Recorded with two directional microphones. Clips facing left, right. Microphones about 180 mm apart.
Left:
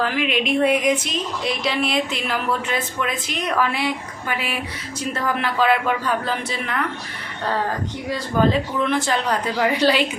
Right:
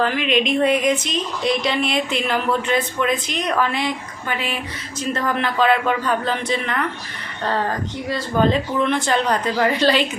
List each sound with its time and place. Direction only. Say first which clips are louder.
0.0 s speech: right 2 dB; 5° left (ahead or behind)
8.1 s speech: right 1 dB; 5° left (ahead or behind)